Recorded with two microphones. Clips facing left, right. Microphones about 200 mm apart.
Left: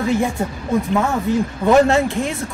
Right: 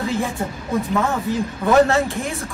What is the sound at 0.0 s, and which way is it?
Speech, 15° left (ahead or behind).